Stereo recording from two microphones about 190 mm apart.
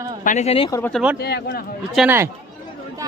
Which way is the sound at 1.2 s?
60° left (ahead or behind).